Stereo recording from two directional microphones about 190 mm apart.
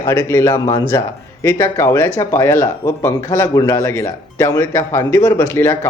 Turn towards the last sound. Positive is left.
turn(degrees=10)  # may be behind; listen again after turning